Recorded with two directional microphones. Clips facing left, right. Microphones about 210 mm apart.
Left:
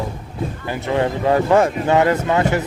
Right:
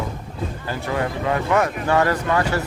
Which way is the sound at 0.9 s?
30° left (ahead or behind).